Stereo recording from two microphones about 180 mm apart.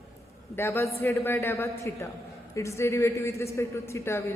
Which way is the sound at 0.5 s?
15° left (ahead or behind).